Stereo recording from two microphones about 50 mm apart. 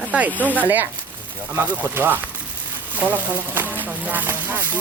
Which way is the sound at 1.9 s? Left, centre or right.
Right.